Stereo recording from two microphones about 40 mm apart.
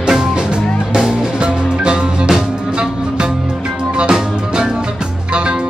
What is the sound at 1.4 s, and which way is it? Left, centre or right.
Music, right.